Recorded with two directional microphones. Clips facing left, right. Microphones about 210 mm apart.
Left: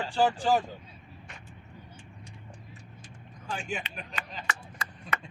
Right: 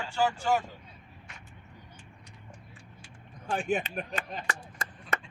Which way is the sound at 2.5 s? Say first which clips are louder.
Left 2 dB; 40° left (ahead or behind).